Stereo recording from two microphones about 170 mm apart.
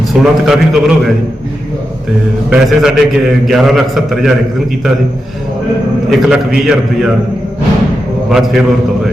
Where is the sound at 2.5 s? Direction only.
Centre (ahead or behind).